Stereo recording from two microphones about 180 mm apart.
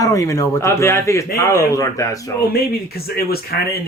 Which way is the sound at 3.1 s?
60° left (ahead or behind).